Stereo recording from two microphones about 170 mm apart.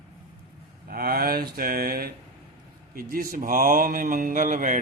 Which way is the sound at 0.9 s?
60° right (ahead or behind).